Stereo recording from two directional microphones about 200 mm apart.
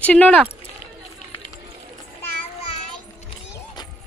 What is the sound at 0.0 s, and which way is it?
Speech, 5° left (ahead or behind).